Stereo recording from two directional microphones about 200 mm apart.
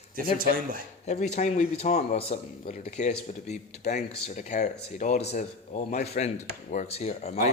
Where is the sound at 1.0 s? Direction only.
35° left (ahead or behind).